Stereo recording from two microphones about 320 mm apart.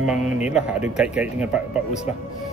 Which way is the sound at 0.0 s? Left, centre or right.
Centre.